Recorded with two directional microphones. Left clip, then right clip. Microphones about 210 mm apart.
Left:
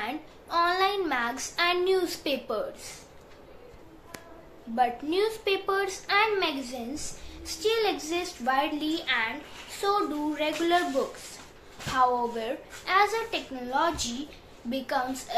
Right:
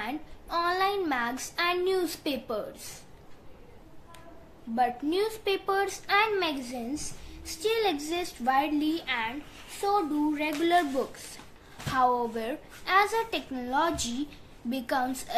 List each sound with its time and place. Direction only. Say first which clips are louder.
0.0 s a woman's voice: left 1 dB; 20° right (ahead or behind)
4.7 s a woman's voice: left 1 dB; 25° right (ahead or behind)
11.9 s a woman's voice: left 1 dB; 25° right (ahead or behind)